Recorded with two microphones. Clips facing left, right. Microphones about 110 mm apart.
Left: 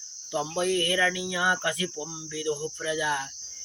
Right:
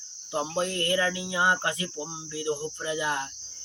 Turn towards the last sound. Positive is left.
turn(degrees=-30)  # may be behind; listen again after turning